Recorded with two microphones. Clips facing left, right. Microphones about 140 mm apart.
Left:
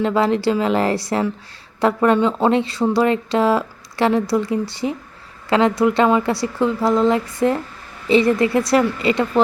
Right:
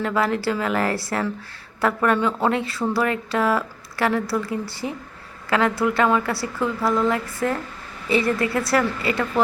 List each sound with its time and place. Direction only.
0.0 s speech: 20° left (ahead or behind)